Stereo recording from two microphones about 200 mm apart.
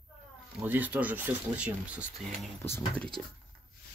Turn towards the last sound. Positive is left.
turn(degrees=10)  # may be behind; listen again after turning